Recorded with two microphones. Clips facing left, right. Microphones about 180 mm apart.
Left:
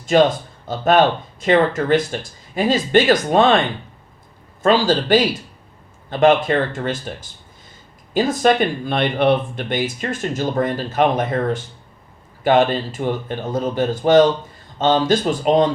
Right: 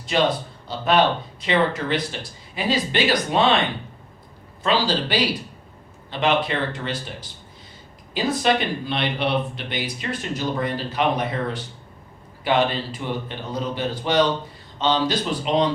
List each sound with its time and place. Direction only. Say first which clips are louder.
0.0 s speech: left 6 dB; 45° left (ahead or behind)
4.6 s speech: left 6 dB; 45° left (ahead or behind)